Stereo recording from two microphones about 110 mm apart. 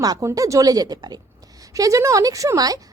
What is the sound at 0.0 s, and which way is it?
A woman's voice, 30° right (ahead or behind).